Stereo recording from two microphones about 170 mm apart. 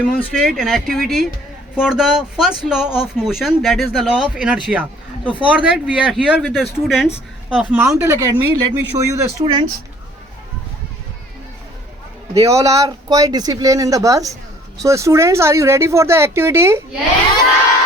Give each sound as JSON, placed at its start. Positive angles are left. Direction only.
{"t": 0.2, "sound": "speech", "side_deg": 0}
{"t": 9.4, "sound": "speech", "side_deg": -30}
{"t": 12.3, "sound": "speech", "side_deg": -20}